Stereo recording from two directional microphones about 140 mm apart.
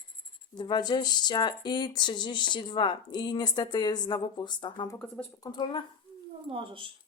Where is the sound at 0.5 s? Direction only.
35° left (ahead or behind).